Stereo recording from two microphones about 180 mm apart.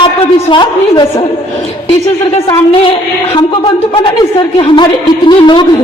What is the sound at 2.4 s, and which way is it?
Speech, 30° left (ahead or behind).